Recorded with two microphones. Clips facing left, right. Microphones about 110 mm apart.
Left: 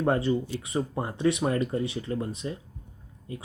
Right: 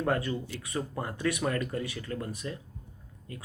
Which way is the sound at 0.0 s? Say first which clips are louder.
Left 5 dB; 25° left (ahead or behind).